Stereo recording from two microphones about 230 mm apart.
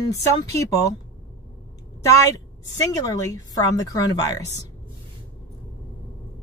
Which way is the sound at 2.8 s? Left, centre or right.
Centre.